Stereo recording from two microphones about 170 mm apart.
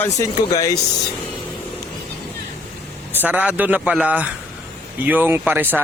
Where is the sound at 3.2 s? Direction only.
10° right (ahead or behind).